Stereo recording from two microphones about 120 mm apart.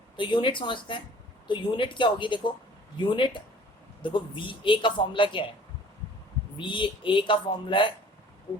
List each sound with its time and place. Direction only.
0.2 s speech: 40° left (ahead or behind)
6.6 s speech: 45° left (ahead or behind)